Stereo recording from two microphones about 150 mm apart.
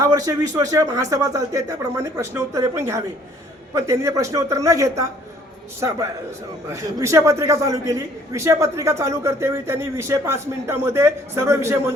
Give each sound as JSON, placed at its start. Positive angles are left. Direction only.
{"t": 0.0, "sound": "a man's voice", "side_deg": -25}
{"t": 6.7, "sound": "a man's voice", "side_deg": -20}